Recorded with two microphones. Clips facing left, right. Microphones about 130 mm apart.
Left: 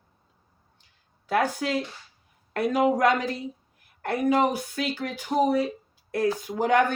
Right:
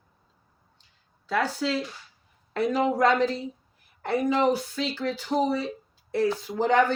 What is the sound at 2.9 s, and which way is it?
Speech, 15° left (ahead or behind).